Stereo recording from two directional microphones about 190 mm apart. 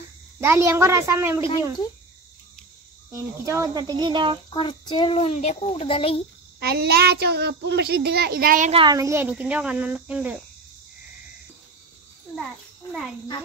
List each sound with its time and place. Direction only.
0.4 s cricket: 15° right (ahead or behind)
3.1 s speech: 15° right (ahead or behind)
4.5 s a child's voice: 25° left (ahead or behind)
6.6 s a woman's voice: 55° right (ahead or behind)
8.7 s cricket: 20° right (ahead or behind)